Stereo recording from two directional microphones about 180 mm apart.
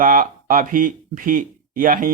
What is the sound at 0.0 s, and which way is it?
Speech, 50° right (ahead or behind).